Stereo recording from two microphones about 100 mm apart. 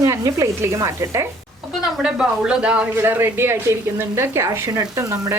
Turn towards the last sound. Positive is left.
turn(degrees=-30)  # may be behind; listen again after turning